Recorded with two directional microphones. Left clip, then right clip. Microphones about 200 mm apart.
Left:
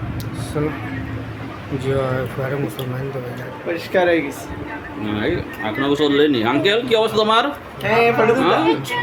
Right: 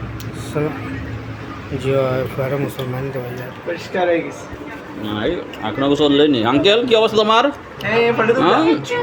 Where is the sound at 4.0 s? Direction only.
40° left (ahead or behind).